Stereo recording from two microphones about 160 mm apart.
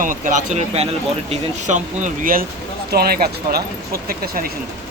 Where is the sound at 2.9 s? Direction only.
75° right (ahead or behind).